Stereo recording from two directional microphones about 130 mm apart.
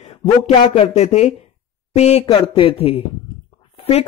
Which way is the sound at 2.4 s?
45° left (ahead or behind).